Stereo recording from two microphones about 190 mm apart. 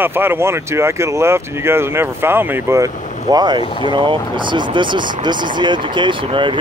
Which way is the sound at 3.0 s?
40° left (ahead or behind).